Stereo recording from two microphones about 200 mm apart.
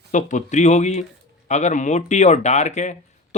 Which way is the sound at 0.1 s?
40° left (ahead or behind).